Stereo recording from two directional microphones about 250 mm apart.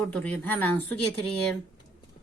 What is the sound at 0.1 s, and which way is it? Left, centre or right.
Speech, centre.